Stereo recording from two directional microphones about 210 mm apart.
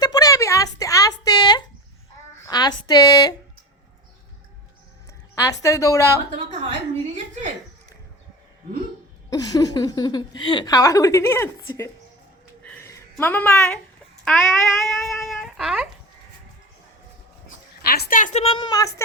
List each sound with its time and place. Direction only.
0.0 s a sound: 15° left (ahead or behind)
2.4 s a woman's voice: 20° left (ahead or behind)
5.3 s speech: 15° left (ahead or behind)
9.3 s speech: 15° left (ahead or behind)
12.6 s a sound: 10° left (ahead or behind)
14.3 s speech: centre (ahead or behind)
17.9 s a woman's voice: 45° left (ahead or behind); by 19.0 s 15° left (ahead or behind)